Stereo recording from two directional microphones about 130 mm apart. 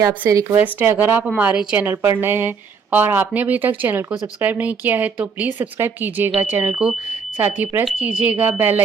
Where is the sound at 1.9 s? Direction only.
20° right (ahead or behind).